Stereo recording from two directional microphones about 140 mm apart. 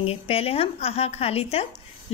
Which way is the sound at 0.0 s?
45° left (ahead or behind).